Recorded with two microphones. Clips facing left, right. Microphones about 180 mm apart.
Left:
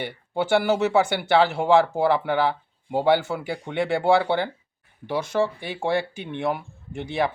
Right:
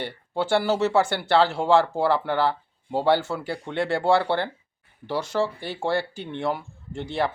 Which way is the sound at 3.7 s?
15° left (ahead or behind).